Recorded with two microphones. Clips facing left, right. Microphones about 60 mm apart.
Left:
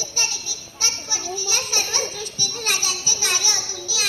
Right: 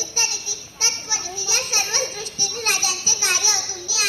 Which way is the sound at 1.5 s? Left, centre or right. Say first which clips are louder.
Right 3 dB; right.